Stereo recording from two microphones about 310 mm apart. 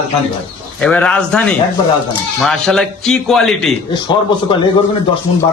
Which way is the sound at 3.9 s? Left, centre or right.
Centre.